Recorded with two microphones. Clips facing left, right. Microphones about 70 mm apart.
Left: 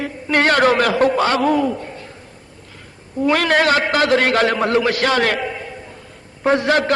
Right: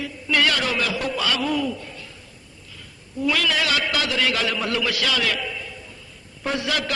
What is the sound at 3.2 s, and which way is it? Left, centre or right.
A man's voice, left.